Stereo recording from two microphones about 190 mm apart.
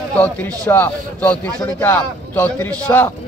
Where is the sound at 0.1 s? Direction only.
10° left (ahead or behind).